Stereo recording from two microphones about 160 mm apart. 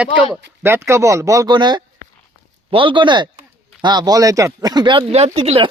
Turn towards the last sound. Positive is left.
turn(degrees=-35)  # may be behind; listen again after turning